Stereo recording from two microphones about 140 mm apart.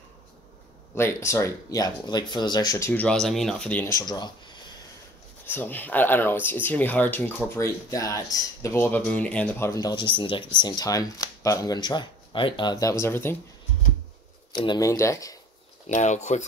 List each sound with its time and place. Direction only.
0.9 s speech: 20° left (ahead or behind)
2.9 s speech: 10° left (ahead or behind)
3.9 s a sound: 30° left (ahead or behind)
5.4 s speech: 15° left (ahead or behind)
9.7 s speech: 25° left (ahead or behind)
10.1 s speech: 35° left (ahead or behind); by 13.4 s 15° left (ahead or behind)
14.5 s speech: 35° left (ahead or behind)
14.9 s speech: 20° left (ahead or behind)
15.9 s speech: 55° left (ahead or behind)